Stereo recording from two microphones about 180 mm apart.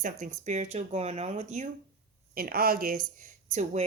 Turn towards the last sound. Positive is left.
turn(degrees=-40)  # may be behind; listen again after turning